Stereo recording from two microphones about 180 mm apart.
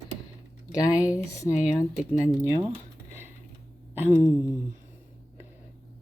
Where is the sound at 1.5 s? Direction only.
5° right (ahead or behind).